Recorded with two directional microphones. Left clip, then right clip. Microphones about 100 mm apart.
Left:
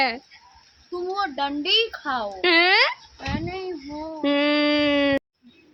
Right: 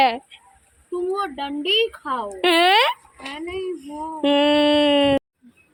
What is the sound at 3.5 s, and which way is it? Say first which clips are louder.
Speech: right 3 dB; 40° left (ahead or behind).